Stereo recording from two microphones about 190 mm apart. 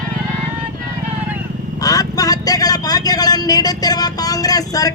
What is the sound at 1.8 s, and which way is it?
Speech, 20° left (ahead or behind).